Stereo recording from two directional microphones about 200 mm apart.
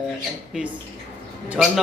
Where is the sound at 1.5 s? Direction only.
Centre (ahead or behind).